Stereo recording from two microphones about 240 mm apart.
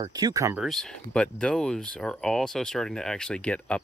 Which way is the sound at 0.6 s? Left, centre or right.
Centre.